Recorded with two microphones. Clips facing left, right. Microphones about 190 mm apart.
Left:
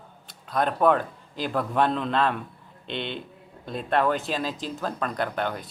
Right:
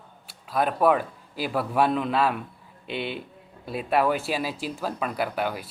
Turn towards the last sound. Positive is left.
turn(degrees=-5)  # may be behind; listen again after turning